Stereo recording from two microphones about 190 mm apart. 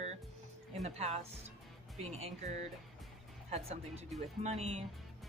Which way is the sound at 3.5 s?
35° right (ahead or behind).